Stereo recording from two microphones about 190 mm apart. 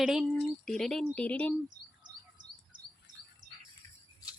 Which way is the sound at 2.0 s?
40° right (ahead or behind).